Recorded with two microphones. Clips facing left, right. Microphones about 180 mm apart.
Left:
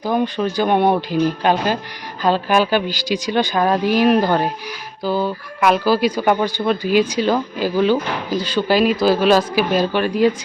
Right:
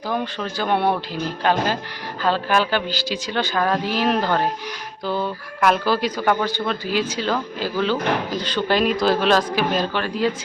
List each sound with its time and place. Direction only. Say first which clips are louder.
0.0 s speech: left 6 dB; 15° left (ahead or behind)